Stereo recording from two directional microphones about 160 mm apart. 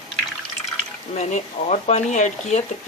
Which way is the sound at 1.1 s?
45° left (ahead or behind).